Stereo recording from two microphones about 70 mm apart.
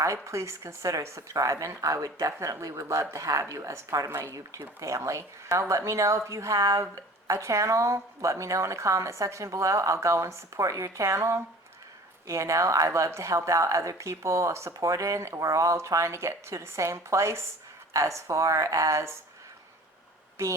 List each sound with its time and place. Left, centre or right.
0.0 s speech: right
20.4 s speech: right